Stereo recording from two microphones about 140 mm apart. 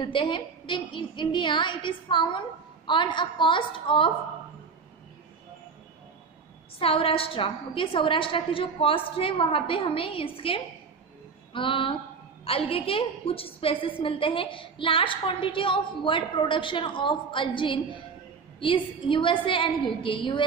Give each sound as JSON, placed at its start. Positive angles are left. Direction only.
{"t": 0.0, "sound": "a woman's voice", "side_deg": 35}
{"t": 6.8, "sound": "a woman's voice", "side_deg": 40}